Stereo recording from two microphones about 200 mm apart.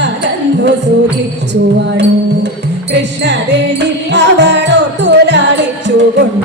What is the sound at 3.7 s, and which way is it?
Music, 60° right (ahead or behind).